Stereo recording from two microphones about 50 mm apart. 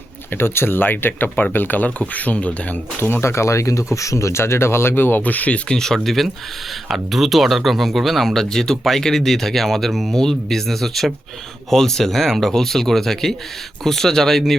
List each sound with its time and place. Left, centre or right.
0.3 s speech: left
3.0 s speech: left
3.2 s speech: left
5.6 s speech: centre